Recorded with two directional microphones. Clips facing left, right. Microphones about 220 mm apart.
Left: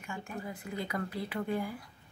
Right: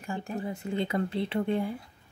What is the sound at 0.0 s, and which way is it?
Speech, 35° right (ahead or behind).